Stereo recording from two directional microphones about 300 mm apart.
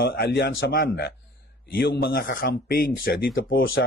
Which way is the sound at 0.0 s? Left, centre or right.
Left.